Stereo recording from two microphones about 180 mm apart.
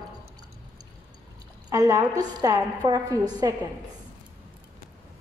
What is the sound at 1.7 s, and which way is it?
A woman's voice, 20° right (ahead or behind).